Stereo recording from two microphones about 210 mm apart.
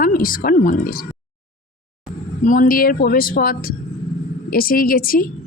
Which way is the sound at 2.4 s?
40° left (ahead or behind).